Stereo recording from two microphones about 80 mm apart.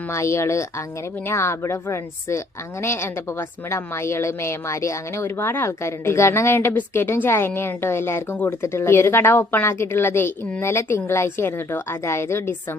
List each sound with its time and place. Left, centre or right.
0.1 s a woman's voice: left